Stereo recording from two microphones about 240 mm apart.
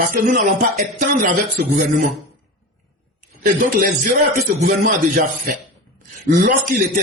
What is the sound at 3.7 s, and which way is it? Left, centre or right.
Speech, right.